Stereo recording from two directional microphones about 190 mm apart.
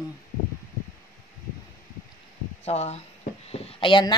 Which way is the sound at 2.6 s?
35° left (ahead or behind).